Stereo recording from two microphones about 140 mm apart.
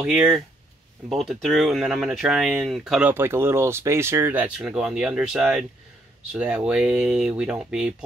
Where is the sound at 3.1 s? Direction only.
15° right (ahead or behind).